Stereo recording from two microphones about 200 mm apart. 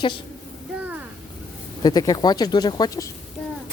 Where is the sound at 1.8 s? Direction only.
20° left (ahead or behind).